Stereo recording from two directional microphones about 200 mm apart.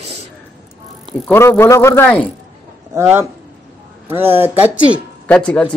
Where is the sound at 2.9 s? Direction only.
15° right (ahead or behind).